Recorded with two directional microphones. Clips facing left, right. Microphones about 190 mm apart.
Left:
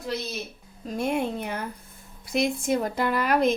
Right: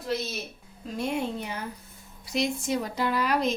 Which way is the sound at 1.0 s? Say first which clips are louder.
Left 3 dB; 55° left (ahead or behind).